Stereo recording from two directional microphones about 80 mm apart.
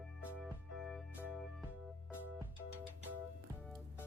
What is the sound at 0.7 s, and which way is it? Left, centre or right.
Music, centre.